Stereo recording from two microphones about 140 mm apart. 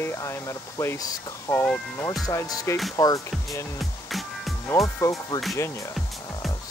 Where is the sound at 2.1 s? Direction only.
25° left (ahead or behind).